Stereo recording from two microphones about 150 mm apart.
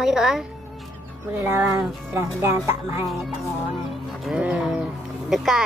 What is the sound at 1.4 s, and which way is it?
Speech, 15° right (ahead or behind).